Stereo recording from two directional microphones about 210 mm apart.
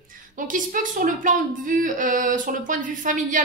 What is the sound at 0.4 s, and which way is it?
Speech, 40° right (ahead or behind).